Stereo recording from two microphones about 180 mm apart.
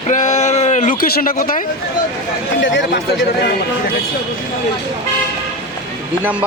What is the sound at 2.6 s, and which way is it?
Speech, 90° left.